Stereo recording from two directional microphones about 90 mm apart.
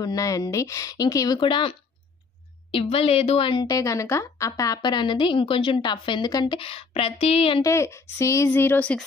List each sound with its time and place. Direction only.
0.0 s speech: 40° left (ahead or behind)
1.4 s a woman's voice: 70° left (ahead or behind)
2.7 s a woman's voice: 90° left
3.6 s speech: 40° left (ahead or behind)
4.8 s a woman's voice: 55° left (ahead or behind); by 7.6 s 90° left
7.6 s speech: 30° left (ahead or behind)